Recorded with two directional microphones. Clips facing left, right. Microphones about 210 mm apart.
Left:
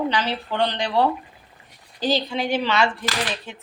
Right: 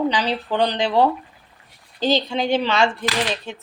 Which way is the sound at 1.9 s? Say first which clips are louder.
Right 3 dB; 25° right (ahead or behind).